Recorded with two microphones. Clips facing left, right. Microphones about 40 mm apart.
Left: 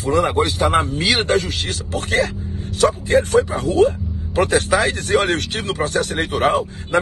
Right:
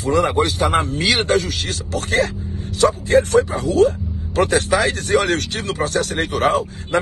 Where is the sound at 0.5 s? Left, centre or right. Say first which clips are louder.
Left 1 dB; left.